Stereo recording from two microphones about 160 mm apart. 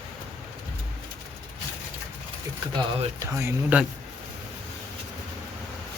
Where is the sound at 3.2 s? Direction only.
20° right (ahead or behind).